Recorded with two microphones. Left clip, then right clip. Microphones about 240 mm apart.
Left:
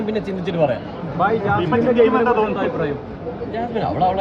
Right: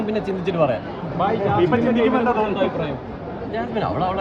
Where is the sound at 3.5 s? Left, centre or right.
Centre.